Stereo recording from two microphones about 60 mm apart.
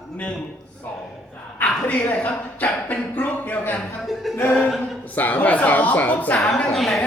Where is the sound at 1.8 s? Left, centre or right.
Left.